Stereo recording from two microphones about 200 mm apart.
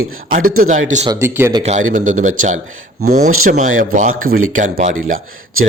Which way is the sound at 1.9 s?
40° right (ahead or behind).